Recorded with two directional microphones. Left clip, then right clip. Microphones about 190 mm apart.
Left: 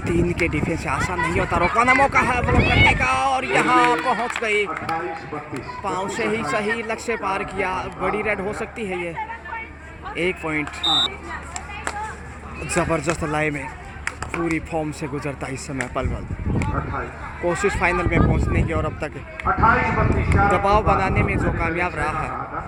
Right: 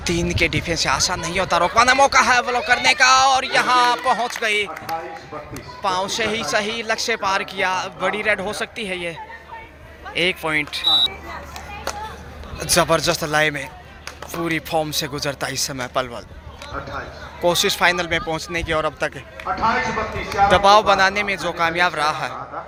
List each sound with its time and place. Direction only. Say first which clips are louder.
0.0 s speech: right 1 dB; 5° right (ahead or behind)
5.8 s speech: right 4 dB; 5° right (ahead or behind)
10.2 s speech: right 4 dB; 5° right (ahead or behind)
12.5 s speech: right 5 dB; centre (ahead or behind)
17.4 s speech: right 4 dB; centre (ahead or behind)
19.5 s speech: left 3 dB; 30° left (ahead or behind)
20.5 s speech: right 6 dB; centre (ahead or behind)